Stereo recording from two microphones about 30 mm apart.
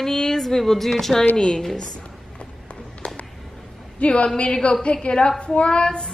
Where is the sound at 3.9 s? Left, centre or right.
Left.